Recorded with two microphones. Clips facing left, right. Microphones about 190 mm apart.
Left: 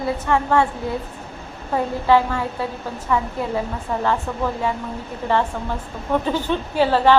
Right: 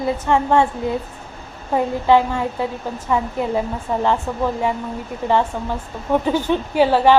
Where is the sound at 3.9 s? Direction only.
20° right (ahead or behind).